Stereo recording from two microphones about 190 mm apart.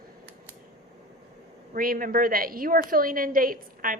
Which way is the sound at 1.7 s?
45° right (ahead or behind).